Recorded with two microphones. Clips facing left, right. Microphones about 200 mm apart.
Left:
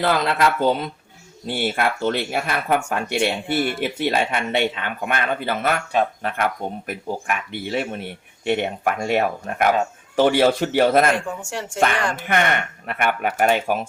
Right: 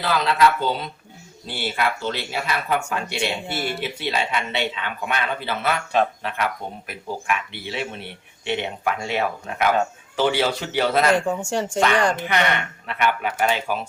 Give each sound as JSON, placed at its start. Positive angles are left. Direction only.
{"t": 0.0, "sound": "speech", "side_deg": 50}
{"t": 11.3, "sound": "speech", "side_deg": -30}
{"t": 12.3, "sound": "speech", "side_deg": 50}